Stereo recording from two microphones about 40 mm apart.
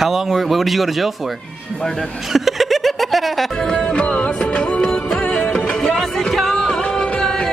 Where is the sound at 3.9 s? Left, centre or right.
Left.